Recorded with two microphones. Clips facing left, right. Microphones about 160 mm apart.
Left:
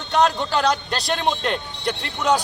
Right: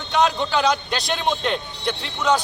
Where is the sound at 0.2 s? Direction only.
Centre (ahead or behind).